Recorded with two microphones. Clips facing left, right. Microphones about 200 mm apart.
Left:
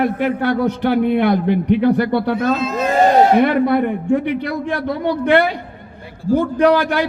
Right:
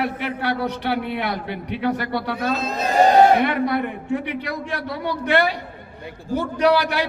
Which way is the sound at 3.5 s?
50° left (ahead or behind).